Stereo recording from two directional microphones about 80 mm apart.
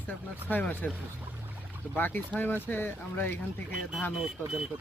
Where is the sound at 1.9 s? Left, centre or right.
Left.